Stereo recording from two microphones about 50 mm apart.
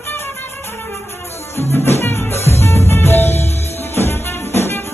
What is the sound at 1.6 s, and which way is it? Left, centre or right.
Music, left.